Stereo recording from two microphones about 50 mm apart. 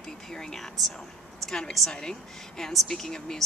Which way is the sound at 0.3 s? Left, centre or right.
Centre.